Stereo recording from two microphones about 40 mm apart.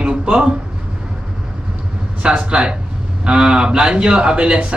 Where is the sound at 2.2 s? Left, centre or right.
Right.